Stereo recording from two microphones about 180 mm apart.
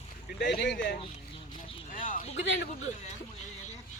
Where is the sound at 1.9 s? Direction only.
45° left (ahead or behind).